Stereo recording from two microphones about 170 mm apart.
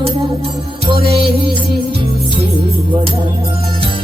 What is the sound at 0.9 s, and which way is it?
Music, 35° right (ahead or behind).